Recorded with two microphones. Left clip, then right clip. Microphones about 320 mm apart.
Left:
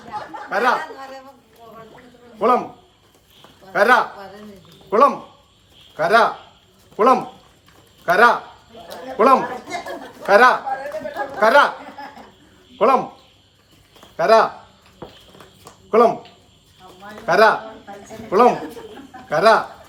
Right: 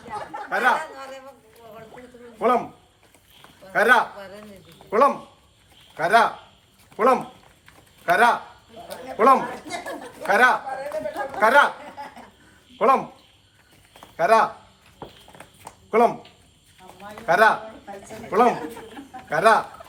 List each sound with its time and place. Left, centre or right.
0.5 s a man's voice: left
2.4 s a man's voice: left
3.7 s a man's voice: left
12.8 s a man's voice: left
14.2 s a man's voice: left
15.9 s speech: left
17.2 s a man's voice: left